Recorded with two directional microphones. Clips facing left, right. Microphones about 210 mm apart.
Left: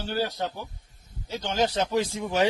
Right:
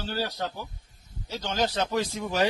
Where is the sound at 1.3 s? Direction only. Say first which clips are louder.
Left 2 dB; 20° left (ahead or behind).